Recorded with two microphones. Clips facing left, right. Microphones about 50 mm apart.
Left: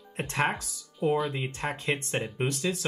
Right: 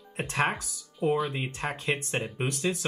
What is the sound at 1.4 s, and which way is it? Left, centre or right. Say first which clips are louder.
Speech: even; right.